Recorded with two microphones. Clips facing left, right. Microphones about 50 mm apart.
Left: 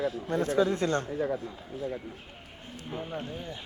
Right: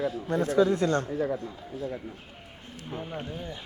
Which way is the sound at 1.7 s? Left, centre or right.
Left.